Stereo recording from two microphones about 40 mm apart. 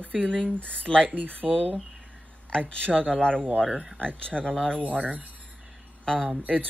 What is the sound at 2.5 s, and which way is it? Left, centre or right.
Speech, left.